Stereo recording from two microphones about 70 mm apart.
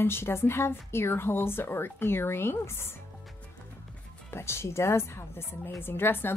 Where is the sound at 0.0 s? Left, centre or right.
Left.